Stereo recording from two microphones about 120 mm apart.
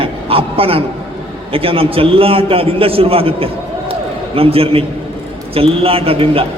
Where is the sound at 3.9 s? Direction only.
50° right (ahead or behind).